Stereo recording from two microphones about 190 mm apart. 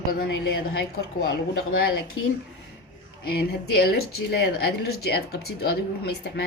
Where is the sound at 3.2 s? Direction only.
55° left (ahead or behind).